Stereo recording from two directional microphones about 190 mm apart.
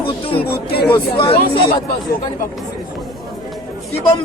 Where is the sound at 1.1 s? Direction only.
30° left (ahead or behind).